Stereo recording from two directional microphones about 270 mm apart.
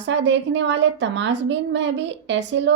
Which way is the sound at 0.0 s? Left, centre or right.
Right.